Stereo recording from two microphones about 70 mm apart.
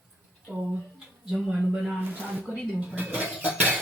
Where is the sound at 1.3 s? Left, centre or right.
Centre.